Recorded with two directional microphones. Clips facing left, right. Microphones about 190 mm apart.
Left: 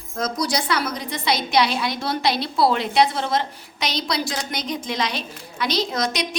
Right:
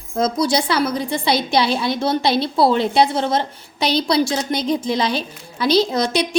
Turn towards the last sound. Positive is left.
turn(degrees=-30)  # may be behind; listen again after turning